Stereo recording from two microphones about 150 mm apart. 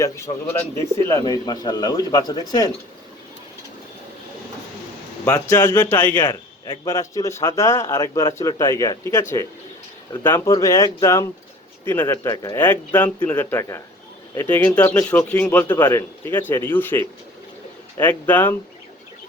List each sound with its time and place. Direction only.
1.0 s a man's voice: 20° left (ahead or behind)
5.2 s a man's voice: 15° left (ahead or behind)
10.2 s a man's voice: 15° left (ahead or behind)
18.0 s speech: 10° left (ahead or behind)